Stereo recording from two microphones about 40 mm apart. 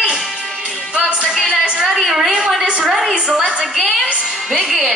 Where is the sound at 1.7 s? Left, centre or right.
Centre.